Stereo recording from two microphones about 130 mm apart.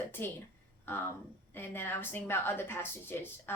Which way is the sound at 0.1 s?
15° left (ahead or behind).